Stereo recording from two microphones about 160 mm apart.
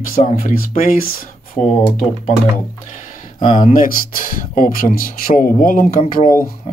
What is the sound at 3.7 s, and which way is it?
A man's voice, 65° left (ahead or behind).